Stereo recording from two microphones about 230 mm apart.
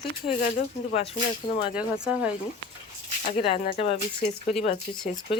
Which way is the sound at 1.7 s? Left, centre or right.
Centre.